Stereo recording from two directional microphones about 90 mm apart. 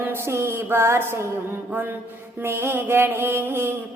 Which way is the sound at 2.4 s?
25° right (ahead or behind).